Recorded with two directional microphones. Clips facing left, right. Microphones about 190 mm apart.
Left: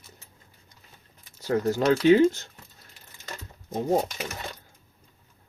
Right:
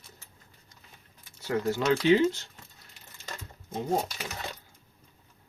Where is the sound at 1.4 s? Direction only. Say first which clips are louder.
Left 4 dB; 45° left (ahead or behind).